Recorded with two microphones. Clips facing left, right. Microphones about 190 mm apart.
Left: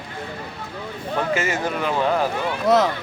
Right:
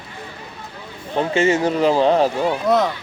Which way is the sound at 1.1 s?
30° right (ahead or behind).